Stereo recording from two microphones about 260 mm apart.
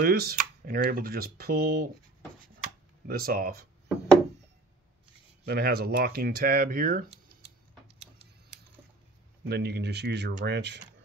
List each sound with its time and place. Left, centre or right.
0.0 s speech: right
3.1 s speech: right
5.4 s speech: right
9.5 s speech: right